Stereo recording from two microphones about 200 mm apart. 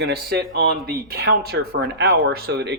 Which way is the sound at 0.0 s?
55° right (ahead or behind).